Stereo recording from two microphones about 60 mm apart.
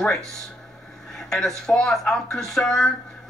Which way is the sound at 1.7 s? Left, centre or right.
Centre.